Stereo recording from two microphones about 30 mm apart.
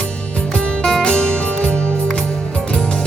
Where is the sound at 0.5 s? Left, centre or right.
Left.